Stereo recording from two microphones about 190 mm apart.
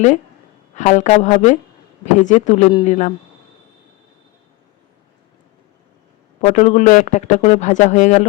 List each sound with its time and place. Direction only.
0.8 s speech: 40° left (ahead or behind)
6.4 s speech: 35° left (ahead or behind)